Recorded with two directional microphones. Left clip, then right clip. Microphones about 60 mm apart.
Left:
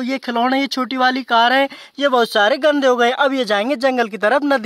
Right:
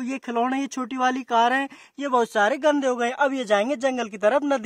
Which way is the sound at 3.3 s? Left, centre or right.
Left.